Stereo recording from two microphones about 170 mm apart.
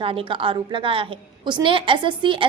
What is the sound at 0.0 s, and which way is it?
A woman's voice, 30° right (ahead or behind).